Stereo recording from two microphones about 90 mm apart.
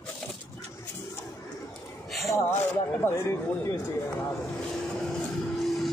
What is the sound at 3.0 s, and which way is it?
Speech, 30° left (ahead or behind).